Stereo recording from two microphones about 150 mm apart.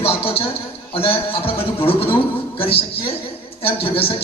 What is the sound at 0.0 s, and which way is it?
A man's voice, 40° left (ahead or behind).